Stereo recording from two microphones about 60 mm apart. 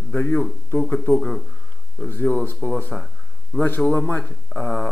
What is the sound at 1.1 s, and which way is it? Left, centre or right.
Speech, centre.